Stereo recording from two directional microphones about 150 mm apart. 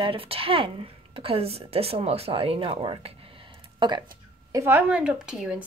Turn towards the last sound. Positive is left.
turn(degrees=-5)  # may be behind; listen again after turning